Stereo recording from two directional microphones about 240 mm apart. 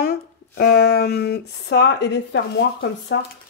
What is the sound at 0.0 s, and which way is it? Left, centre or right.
Speech, left.